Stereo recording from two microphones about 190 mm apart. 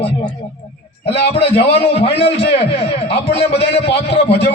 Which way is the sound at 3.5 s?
60° left (ahead or behind).